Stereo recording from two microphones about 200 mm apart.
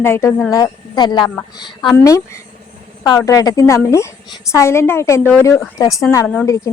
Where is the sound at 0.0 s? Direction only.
10° left (ahead or behind).